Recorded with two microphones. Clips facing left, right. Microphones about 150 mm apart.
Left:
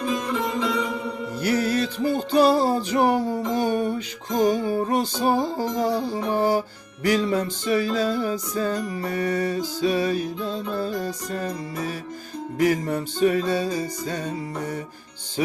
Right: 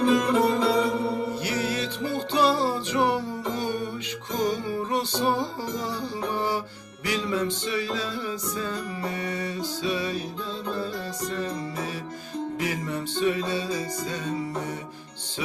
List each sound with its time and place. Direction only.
0.3 s music: 40° right (ahead or behind)
1.4 s music: 45° left (ahead or behind)
12.5 s music: 45° left (ahead or behind)